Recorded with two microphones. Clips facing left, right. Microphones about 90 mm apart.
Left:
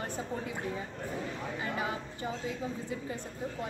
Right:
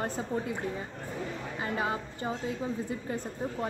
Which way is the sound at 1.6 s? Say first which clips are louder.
Right 4 dB; 35° right (ahead or behind).